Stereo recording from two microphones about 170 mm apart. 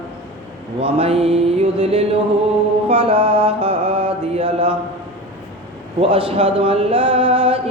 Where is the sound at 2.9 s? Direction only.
35° right (ahead or behind).